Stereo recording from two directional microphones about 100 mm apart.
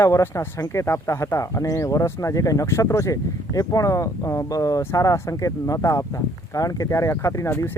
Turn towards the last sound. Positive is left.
turn(degrees=25)  # may be behind; listen again after turning